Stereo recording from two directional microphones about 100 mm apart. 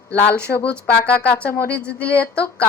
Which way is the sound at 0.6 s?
15° left (ahead or behind).